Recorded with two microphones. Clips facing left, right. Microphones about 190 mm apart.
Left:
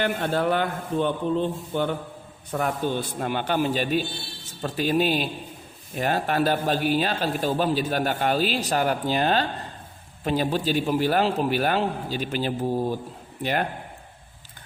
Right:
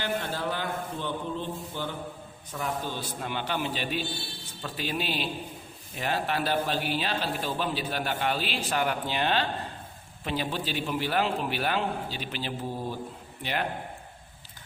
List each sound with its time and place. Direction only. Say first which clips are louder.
0.0 s a man's voice: left 7 dB; 60° left (ahead or behind)